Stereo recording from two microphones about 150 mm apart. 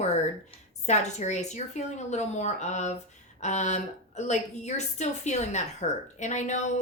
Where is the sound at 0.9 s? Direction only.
50° left (ahead or behind).